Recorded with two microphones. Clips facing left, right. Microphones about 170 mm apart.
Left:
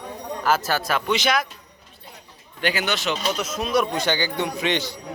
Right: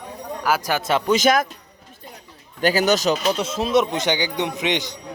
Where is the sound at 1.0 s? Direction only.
45° right (ahead or behind).